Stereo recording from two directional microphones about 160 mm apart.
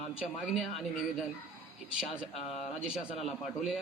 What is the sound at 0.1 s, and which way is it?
Speech, 5° right (ahead or behind).